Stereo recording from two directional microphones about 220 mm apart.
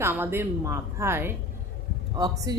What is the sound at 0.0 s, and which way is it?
Speech, 10° right (ahead or behind).